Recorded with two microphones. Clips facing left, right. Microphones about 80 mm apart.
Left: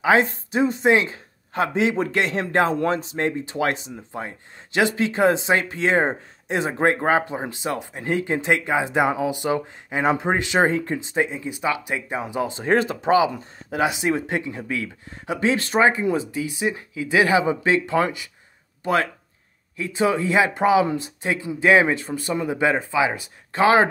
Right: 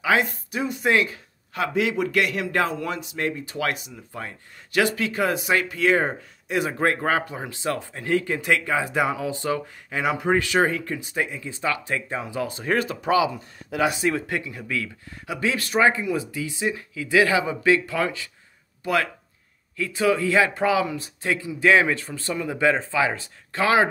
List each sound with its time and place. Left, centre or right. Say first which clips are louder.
0.0 s speech: left 4 dB; left
19.8 s speech: even; left